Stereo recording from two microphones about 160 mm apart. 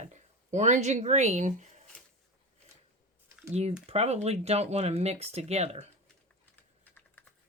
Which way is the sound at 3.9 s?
40° right (ahead or behind).